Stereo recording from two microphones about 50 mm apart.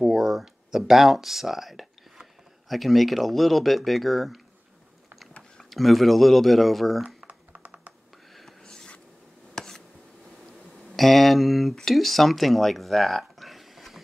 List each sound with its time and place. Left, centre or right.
0.0 s speech: centre
5.6 s speech: centre
7.2 s typing: right
8.6 s a sound: centre
11.0 s speech: centre